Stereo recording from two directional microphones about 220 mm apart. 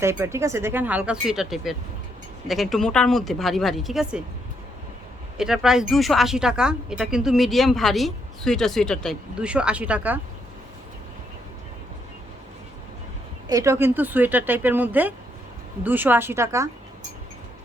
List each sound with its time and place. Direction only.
0.0 s speech: 10° right (ahead or behind)
5.4 s speech: 5° right (ahead or behind)
13.5 s speech: 15° right (ahead or behind)